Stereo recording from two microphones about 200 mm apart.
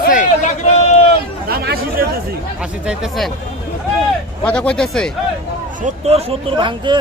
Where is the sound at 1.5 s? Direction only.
50° right (ahead or behind).